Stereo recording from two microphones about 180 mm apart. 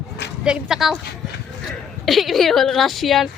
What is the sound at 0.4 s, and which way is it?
Speech, 5° right (ahead or behind).